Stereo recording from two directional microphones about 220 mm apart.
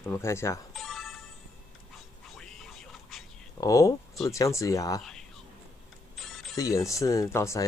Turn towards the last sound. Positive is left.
turn(degrees=15)  # may be behind; listen again after turning